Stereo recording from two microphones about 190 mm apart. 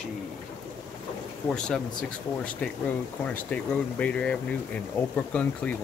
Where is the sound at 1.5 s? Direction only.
5° left (ahead or behind).